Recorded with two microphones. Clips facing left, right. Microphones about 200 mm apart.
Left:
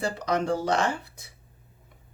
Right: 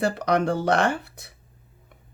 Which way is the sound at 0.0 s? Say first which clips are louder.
Right 5 dB; 65° right (ahead or behind).